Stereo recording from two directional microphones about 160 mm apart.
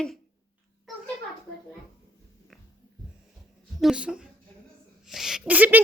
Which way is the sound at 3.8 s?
5° right (ahead or behind).